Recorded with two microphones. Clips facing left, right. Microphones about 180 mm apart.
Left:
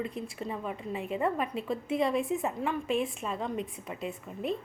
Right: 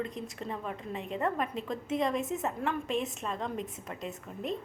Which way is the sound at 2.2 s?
45° right (ahead or behind).